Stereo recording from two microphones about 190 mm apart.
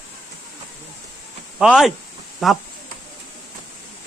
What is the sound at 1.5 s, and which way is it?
Speech, centre (ahead or behind).